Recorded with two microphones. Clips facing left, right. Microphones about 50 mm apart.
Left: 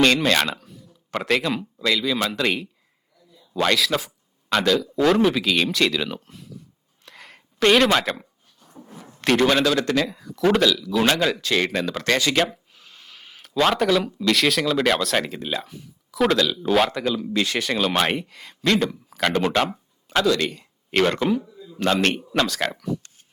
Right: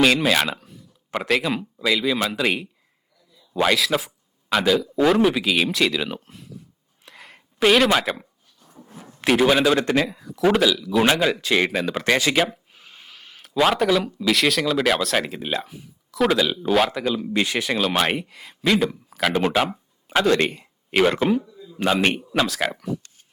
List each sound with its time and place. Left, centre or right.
0.0 s a man's voice: centre
7.0 s a sound: centre
8.5 s a sound: centre
9.2 s speech: centre
9.7 s a man's voice: right
10.1 s speech: centre
12.7 s a sound: right
13.1 s speech: centre
20.2 s speech: right
20.9 s speech: centre
21.4 s a sound: centre
22.0 s speech: centre